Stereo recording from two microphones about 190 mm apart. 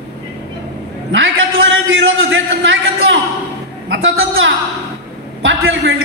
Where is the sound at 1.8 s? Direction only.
90° right.